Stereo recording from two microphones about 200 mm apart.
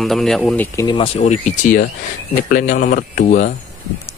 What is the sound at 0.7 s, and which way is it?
Speech, 25° left (ahead or behind).